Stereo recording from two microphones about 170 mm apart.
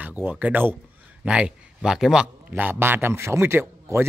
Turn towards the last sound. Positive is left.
turn(degrees=-15)  # may be behind; listen again after turning